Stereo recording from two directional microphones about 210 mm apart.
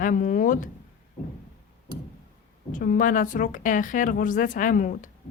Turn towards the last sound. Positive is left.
turn(degrees=40)  # may be behind; listen again after turning